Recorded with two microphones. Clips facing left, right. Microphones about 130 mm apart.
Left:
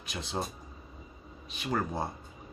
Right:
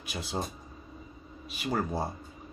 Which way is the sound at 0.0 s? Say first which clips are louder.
Right 2 dB; 10° right (ahead or behind).